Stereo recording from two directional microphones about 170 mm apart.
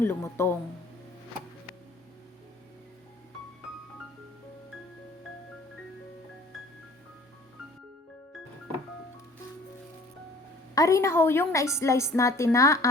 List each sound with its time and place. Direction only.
0.0 s a woman's voice: 15° left (ahead or behind)
10.8 s a woman's voice: 15° left (ahead or behind)